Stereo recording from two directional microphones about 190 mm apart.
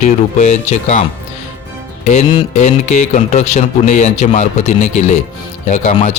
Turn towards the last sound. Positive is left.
turn(degrees=40)  # may be behind; listen again after turning